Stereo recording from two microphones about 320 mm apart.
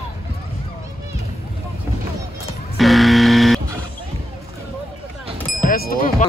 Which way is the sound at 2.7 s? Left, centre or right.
Centre.